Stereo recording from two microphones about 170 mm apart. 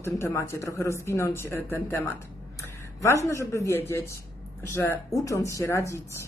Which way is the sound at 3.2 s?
15° left (ahead or behind).